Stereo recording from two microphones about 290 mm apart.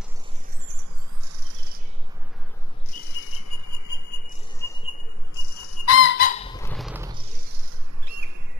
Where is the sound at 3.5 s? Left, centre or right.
Left.